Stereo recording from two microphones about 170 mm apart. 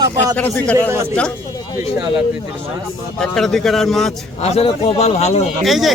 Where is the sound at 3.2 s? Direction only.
Centre (ahead or behind).